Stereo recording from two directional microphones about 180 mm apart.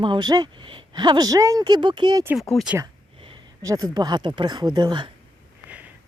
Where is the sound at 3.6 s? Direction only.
20° right (ahead or behind).